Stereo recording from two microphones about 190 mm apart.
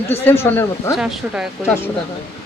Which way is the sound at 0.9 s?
Centre (ahead or behind).